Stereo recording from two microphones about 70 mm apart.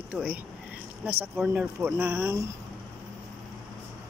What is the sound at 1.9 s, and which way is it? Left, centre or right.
Speech, right.